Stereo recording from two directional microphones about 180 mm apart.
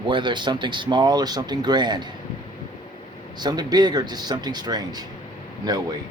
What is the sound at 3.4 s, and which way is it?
Speech, 20° right (ahead or behind).